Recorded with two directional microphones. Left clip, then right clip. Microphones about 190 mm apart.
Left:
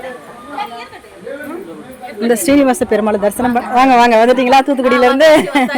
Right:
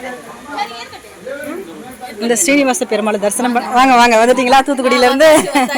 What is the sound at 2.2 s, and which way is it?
A woman's voice, 25° left (ahead or behind).